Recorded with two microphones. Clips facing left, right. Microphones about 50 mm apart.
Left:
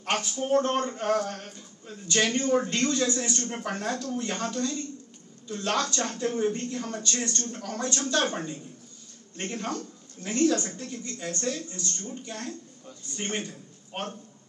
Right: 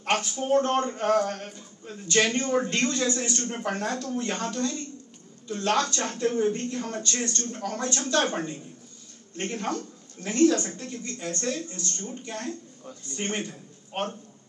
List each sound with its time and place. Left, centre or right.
0.3 s speech: right